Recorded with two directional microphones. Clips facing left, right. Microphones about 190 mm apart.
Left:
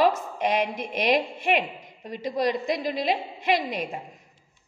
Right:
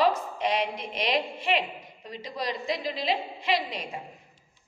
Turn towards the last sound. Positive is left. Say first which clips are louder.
# left 4 dB
turn(degrees=50)  # may be behind; listen again after turning